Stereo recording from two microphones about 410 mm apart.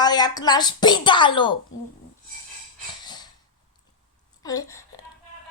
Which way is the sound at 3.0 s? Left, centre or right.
Centre.